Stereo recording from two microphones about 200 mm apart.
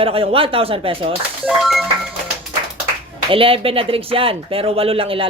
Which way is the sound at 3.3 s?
25° right (ahead or behind).